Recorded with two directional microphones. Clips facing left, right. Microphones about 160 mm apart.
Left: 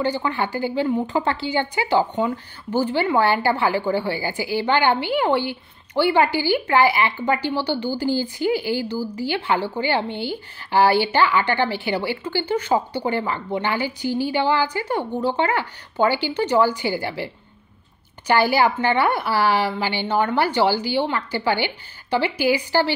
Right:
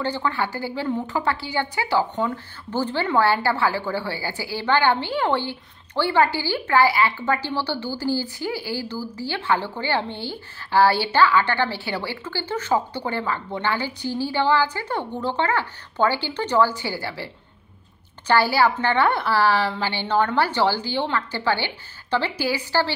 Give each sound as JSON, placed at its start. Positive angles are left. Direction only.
{"t": 0.0, "sound": "a woman's voice", "side_deg": 15}